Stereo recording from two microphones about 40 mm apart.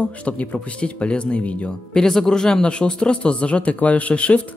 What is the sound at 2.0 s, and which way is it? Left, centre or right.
Speech, centre.